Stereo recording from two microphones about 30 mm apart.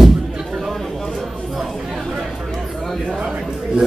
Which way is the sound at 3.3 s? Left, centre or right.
Right.